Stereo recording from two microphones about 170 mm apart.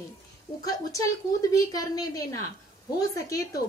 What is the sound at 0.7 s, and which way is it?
A woman's voice, 20° left (ahead or behind).